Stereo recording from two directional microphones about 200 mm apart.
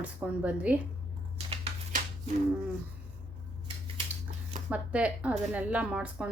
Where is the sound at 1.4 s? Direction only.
30° right (ahead or behind).